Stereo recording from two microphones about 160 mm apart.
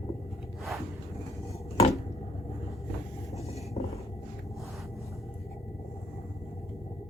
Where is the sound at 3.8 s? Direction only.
40° left (ahead or behind).